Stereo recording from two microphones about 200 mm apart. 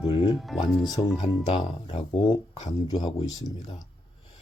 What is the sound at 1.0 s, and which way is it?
Speech, 20° left (ahead or behind).